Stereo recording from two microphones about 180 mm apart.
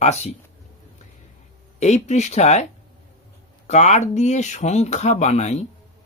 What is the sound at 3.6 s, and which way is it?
Speech, 40° left (ahead or behind).